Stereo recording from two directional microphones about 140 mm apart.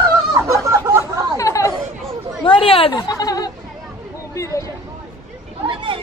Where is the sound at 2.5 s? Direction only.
40° left (ahead or behind).